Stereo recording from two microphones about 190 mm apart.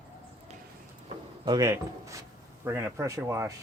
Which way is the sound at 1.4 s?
20° right (ahead or behind).